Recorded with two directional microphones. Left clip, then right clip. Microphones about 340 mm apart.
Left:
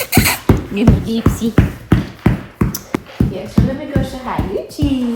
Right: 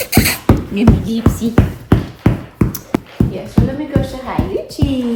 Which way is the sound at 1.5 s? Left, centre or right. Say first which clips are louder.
Right 1 dB; centre.